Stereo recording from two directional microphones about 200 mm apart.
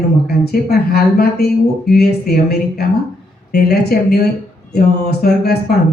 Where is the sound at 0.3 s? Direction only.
50° left (ahead or behind).